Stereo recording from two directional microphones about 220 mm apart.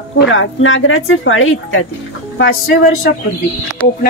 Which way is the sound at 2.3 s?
50° left (ahead or behind).